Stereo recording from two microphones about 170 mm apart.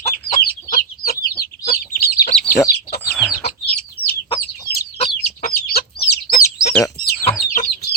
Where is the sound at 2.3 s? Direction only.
5° left (ahead or behind).